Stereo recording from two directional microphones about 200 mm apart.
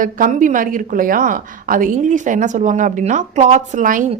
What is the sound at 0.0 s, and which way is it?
A woman's voice, 40° right (ahead or behind).